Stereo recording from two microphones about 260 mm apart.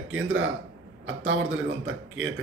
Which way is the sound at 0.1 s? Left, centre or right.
Right.